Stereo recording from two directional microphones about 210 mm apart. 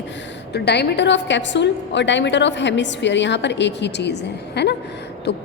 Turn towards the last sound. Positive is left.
turn(degrees=50)  # may be behind; listen again after turning